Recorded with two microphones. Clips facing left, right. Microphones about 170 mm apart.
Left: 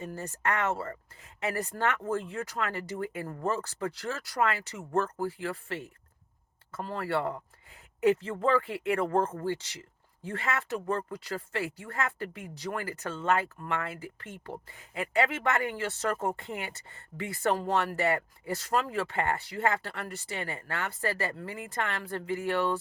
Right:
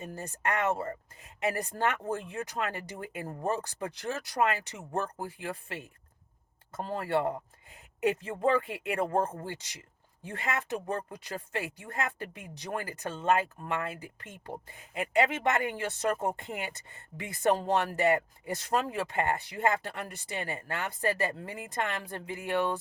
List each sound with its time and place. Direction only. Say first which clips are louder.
0.0 s speech: left 1 dB; 15° right (ahead or behind)